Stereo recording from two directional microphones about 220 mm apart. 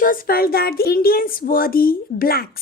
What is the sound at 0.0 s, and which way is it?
A woman's voice, 40° left (ahead or behind).